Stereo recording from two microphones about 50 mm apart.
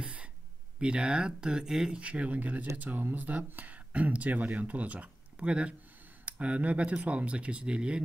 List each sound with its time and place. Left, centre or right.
0.0 s gasp: right
0.7 s speech: centre
2.0 s speech: right